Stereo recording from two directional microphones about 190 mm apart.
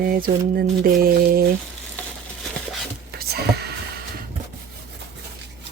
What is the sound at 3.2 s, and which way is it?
Whispering, 55° right (ahead or behind).